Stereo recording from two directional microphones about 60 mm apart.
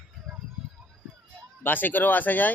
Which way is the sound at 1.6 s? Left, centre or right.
Left.